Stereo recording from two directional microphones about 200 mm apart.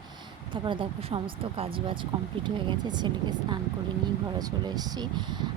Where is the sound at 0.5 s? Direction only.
25° right (ahead or behind).